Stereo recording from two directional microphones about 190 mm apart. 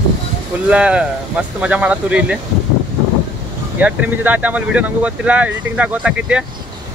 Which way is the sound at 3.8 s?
10° right (ahead or behind).